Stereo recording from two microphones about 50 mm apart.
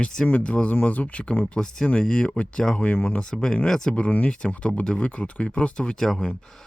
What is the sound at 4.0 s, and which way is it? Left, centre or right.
Speech, left.